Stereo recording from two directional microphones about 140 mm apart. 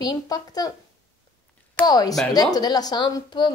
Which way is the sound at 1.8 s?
30° left (ahead or behind).